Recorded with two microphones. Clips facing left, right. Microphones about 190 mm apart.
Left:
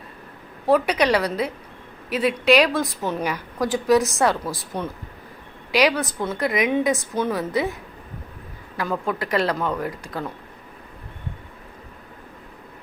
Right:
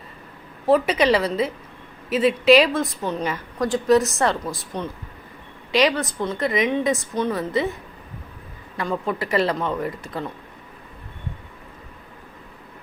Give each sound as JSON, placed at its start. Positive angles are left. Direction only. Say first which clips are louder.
{"t": 0.7, "sound": "a woman's voice", "louder": "right 1 dB", "side_deg": 0}
{"t": 8.8, "sound": "a woman's voice", "louder": "even", "side_deg": 0}